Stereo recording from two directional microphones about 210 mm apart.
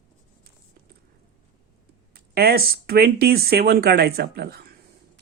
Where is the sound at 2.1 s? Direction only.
45° right (ahead or behind).